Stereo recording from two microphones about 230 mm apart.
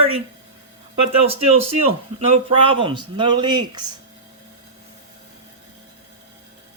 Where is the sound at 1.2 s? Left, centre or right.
Right.